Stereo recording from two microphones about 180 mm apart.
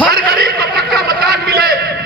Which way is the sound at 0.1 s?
60° right (ahead or behind).